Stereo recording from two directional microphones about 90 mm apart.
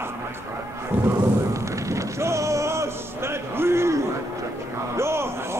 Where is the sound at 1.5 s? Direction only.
35° right (ahead or behind).